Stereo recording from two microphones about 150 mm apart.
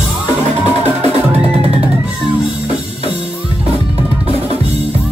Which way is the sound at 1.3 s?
45° right (ahead or behind).